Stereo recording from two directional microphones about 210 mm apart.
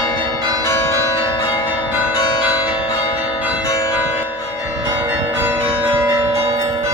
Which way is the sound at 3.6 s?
15° left (ahead or behind).